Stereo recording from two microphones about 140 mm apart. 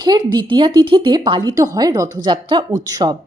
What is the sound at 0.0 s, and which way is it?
Speech, 30° right (ahead or behind).